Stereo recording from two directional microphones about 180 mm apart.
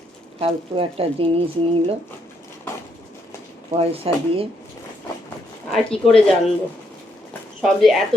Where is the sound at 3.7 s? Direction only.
35° right (ahead or behind).